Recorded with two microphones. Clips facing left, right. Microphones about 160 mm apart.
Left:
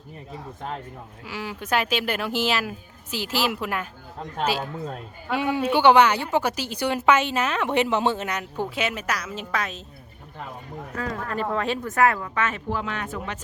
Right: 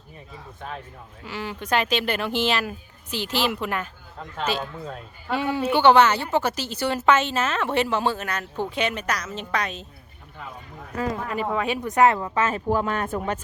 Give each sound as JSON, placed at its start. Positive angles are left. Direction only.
{"t": 1.2, "sound": "a woman's voice", "side_deg": 10}
{"t": 5.3, "sound": "a woman's voice", "side_deg": 10}
{"t": 8.7, "sound": "a woman's voice", "side_deg": 5}
{"t": 10.9, "sound": "speech", "side_deg": -20}
{"t": 11.3, "sound": "speech", "side_deg": -5}
{"t": 11.8, "sound": "speech", "side_deg": -20}